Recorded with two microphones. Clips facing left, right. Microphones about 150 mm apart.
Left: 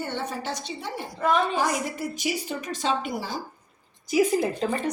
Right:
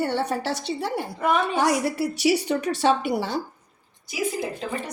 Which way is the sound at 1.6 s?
75° right (ahead or behind).